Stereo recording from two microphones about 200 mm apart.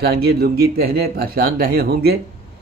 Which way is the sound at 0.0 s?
50° right (ahead or behind).